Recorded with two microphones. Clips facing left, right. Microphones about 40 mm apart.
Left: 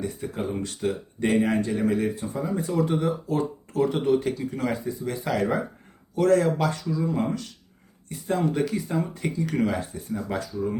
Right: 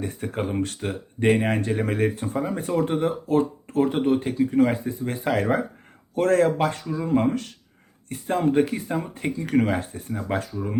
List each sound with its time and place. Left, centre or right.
0.0 s speech: right